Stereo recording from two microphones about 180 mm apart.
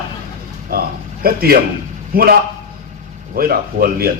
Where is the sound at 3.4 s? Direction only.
55° right (ahead or behind).